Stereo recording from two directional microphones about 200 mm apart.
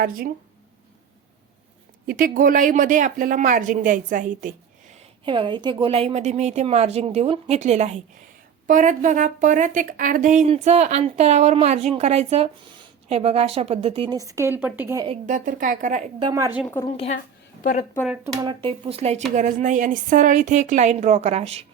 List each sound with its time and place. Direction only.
2.0 s a woman's voice: 45° right (ahead or behind)
5.2 s a woman's voice: 25° right (ahead or behind)
15.0 s a woman's voice: 35° right (ahead or behind)
16.3 s a woman's voice: 10° right (ahead or behind)
17.6 s speech: 40° left (ahead or behind)
18.4 s a woman's voice: 25° right (ahead or behind)